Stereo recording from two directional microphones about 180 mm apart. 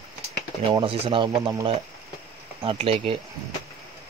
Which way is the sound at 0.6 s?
30° right (ahead or behind).